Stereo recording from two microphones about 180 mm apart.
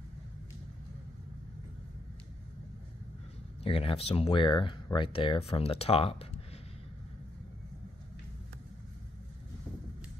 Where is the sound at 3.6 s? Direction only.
30° left (ahead or behind).